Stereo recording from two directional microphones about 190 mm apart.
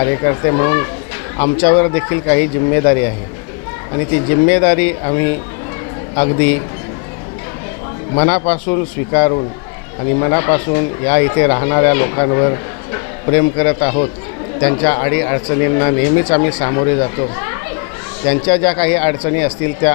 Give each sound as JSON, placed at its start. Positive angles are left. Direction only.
{"t": 0.0, "sound": "speech", "side_deg": 20}
{"t": 8.4, "sound": "speech", "side_deg": 15}